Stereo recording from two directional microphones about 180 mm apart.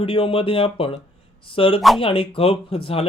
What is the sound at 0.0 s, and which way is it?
Speech, 30° left (ahead or behind).